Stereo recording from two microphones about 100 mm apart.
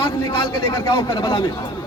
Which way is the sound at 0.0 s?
55° left (ahead or behind).